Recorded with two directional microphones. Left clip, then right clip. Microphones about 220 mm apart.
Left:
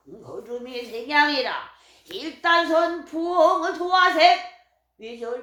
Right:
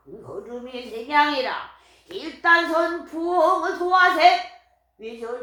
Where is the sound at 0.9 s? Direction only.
45° left (ahead or behind).